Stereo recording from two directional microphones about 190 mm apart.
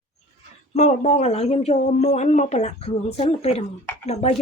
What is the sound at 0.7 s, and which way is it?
Speech, 35° left (ahead or behind).